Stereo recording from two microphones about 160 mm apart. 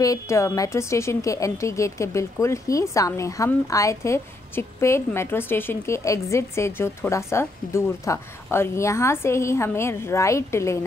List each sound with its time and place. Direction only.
0.0 s a woman's voice: 20° left (ahead or behind)